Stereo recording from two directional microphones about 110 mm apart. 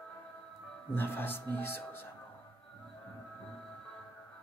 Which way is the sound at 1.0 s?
20° left (ahead or behind).